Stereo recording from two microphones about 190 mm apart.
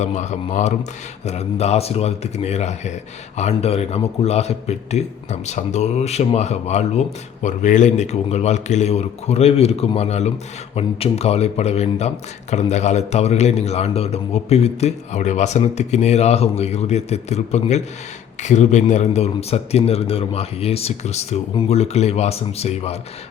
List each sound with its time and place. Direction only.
0.0 s a man's voice: 35° left (ahead or behind)